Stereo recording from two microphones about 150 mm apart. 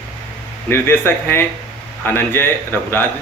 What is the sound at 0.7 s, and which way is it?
A man's voice, 15° left (ahead or behind).